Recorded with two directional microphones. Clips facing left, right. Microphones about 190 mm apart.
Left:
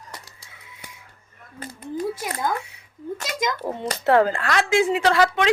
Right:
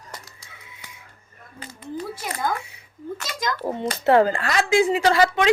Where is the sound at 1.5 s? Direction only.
50° left (ahead or behind).